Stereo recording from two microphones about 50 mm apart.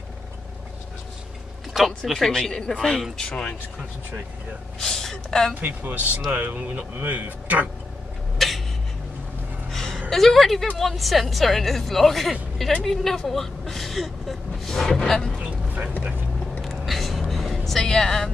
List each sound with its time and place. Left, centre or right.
2.0 s a woman's voice: centre
2.5 s speech: centre
4.7 s speech: centre
5.5 s speech: right
8.4 s a sound: centre
9.7 s music: centre
10.8 s a woman's voice: centre
15.3 s vehicle: right
16.6 s a sound: centre